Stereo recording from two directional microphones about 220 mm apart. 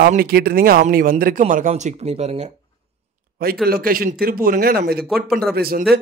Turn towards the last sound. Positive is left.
turn(degrees=-45)  # may be behind; listen again after turning